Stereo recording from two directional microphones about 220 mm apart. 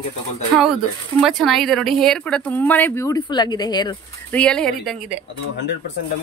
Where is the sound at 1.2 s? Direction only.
Centre (ahead or behind); by 3.9 s 20° left (ahead or behind).